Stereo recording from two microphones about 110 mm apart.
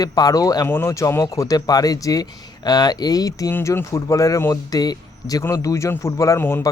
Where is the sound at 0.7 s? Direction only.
25° left (ahead or behind).